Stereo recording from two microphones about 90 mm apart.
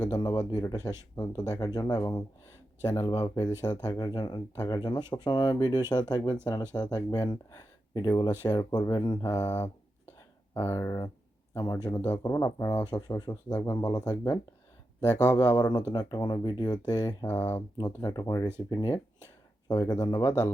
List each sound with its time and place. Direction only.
0.0 s speech: 50° left (ahead or behind)
9.3 s speech: 25° left (ahead or behind)
12.1 s speech: 45° left (ahead or behind)
12.8 s speech: 50° left (ahead or behind)
15.2 s speech: 20° left (ahead or behind)
15.5 s speech: 50° left (ahead or behind)
17.2 s speech: 25° left (ahead or behind)
17.7 s speech: 50° left (ahead or behind)